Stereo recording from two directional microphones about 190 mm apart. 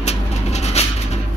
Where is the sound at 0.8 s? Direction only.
35° left (ahead or behind).